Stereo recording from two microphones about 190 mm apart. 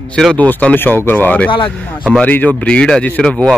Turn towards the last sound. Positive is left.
turn(degrees=5)  # may be behind; listen again after turning